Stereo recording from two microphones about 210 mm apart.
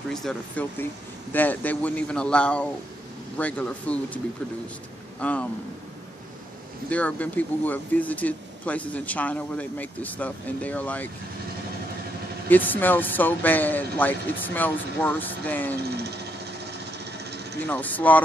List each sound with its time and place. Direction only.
0.1 s speech: 5° left (ahead or behind)
5.2 s speech: 5° left (ahead or behind)
6.9 s speech: 5° left (ahead or behind)
12.4 s speech: 10° left (ahead or behind)
17.0 s a sound: 50° right (ahead or behind)
17.6 s speech: 10° left (ahead or behind)